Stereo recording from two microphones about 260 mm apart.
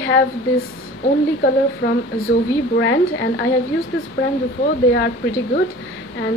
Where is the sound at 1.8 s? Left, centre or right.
Left.